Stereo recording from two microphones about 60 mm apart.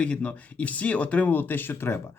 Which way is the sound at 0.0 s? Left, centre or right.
Left.